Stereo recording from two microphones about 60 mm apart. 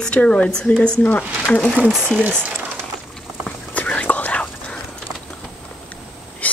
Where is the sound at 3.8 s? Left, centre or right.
Left.